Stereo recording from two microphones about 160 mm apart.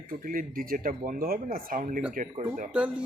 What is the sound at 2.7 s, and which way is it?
Speech, 5° right (ahead or behind).